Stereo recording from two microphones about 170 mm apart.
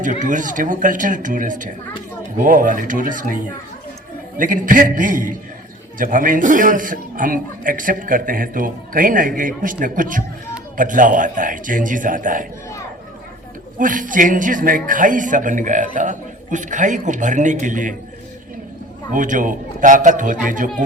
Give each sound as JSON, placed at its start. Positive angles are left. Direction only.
{"t": 0.0, "sound": "a man's voice", "side_deg": -50}
{"t": 13.7, "sound": "a man's voice", "side_deg": -50}
{"t": 19.1, "sound": "a man's voice", "side_deg": -50}